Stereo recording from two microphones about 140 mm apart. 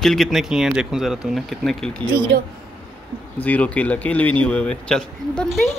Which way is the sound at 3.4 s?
10° left (ahead or behind).